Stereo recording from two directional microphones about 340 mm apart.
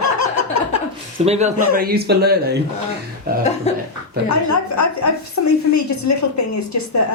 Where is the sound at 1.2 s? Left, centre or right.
Centre.